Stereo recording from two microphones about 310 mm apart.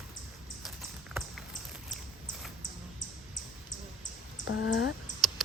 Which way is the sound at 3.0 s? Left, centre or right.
Left.